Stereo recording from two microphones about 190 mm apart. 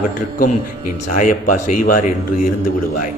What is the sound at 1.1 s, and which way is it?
Speech, 45° left (ahead or behind).